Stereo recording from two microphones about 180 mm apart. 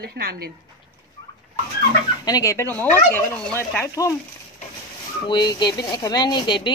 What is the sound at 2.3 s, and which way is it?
Fowl, 20° left (ahead or behind).